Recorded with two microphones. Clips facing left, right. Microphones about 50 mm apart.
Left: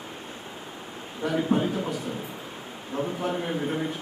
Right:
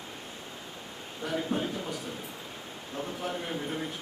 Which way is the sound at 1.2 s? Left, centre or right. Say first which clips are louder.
Left 6 dB; centre.